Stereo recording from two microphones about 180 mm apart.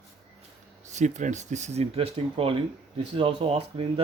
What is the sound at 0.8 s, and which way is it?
Speech, 40° right (ahead or behind).